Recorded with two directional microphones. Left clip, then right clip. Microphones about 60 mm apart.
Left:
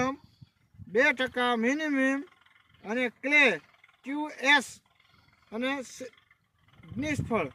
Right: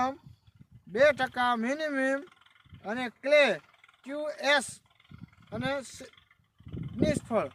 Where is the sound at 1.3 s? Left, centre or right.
Right.